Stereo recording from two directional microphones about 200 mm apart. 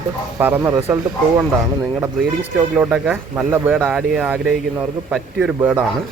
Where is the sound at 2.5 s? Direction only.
10° right (ahead or behind).